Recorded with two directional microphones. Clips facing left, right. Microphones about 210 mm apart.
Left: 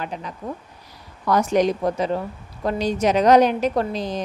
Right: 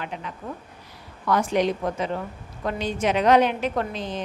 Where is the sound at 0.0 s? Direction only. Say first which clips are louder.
Left 3 dB; 40° left (ahead or behind).